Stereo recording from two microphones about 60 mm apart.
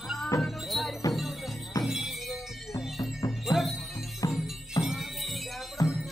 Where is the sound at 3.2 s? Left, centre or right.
Left.